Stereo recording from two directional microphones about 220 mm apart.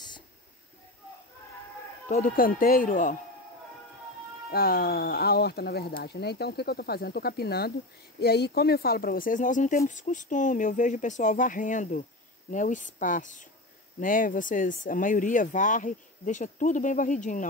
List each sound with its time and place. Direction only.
2.0 s speech: 35° left (ahead or behind)
4.5 s speech: 45° left (ahead or behind)